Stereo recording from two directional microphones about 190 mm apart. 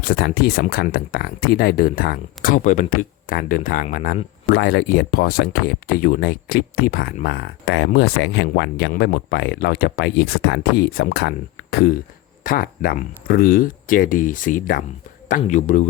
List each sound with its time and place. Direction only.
0.0 s speech: 50° left (ahead or behind); by 8.9 s 70° left (ahead or behind)
8.9 s speech: 55° left (ahead or behind); by 15.9 s 40° left (ahead or behind)